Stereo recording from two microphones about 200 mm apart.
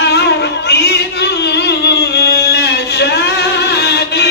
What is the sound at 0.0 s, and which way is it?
Music, 55° left (ahead or behind).